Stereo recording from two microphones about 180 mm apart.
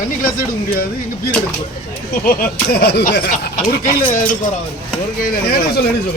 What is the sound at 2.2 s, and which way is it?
Speech, 60° left (ahead or behind).